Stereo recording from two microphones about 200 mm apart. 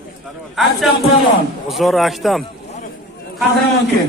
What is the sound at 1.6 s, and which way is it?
Speech, centre (ahead or behind).